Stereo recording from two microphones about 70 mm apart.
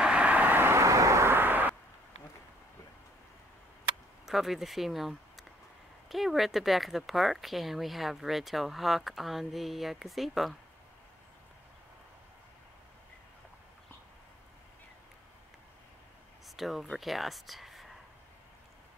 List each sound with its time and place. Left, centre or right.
0.0 s vehicle: centre
4.3 s speech: centre
16.4 s a sound: centre
16.9 s speech: centre